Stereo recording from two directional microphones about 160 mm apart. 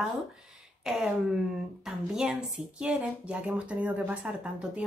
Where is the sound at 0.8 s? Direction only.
5° right (ahead or behind).